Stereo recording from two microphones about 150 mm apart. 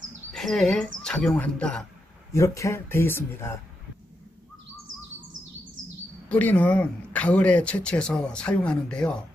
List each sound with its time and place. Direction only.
0.3 s speech: centre (ahead or behind)
2.3 s speech: 20° left (ahead or behind)
6.2 s speech: 10° left (ahead or behind)